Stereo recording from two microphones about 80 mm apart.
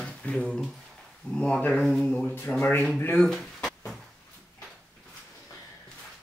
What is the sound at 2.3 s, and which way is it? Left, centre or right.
Speech, left.